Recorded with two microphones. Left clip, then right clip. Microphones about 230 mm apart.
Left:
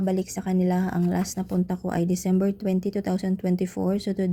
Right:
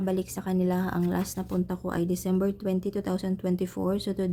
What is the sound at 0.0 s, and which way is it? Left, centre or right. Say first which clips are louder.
Speech: left 3 dB; centre.